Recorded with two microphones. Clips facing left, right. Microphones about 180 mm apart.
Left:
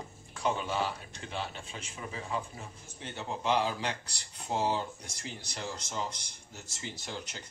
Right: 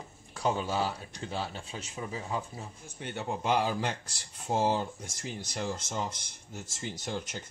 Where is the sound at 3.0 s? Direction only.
55° right (ahead or behind).